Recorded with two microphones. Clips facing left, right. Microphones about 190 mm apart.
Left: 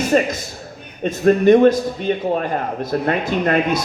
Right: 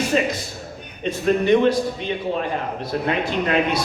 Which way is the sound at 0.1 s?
50° left (ahead or behind).